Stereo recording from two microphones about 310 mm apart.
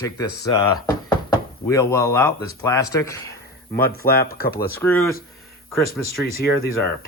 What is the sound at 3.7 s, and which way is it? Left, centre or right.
Speech, left.